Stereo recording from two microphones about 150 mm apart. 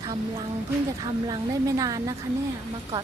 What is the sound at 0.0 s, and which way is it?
A woman's voice, 30° right (ahead or behind).